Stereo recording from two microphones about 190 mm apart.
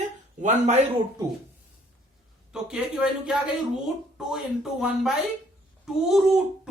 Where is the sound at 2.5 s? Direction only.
5° right (ahead or behind).